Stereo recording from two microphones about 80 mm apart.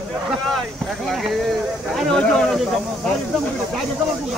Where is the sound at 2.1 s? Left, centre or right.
Centre.